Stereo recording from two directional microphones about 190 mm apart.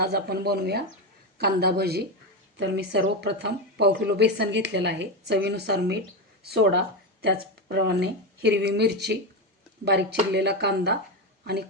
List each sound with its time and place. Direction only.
0.0 s speech: 55° right (ahead or behind)